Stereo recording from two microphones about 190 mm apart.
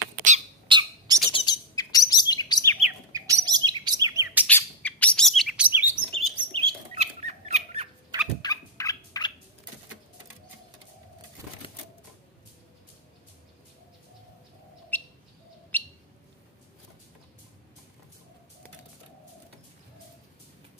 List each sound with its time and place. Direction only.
0.7 s bird: 20° right (ahead or behind)
1.3 s chirp: 20° left (ahead or behind)
3.1 s bird: 20° right (ahead or behind)
4.5 s chirp: 10° left (ahead or behind); by 5.9 s 10° right (ahead or behind)
6.1 s bird: 30° right (ahead or behind)
8.4 s turkey: 20° left (ahead or behind)
14.9 s bird: 10° left (ahead or behind)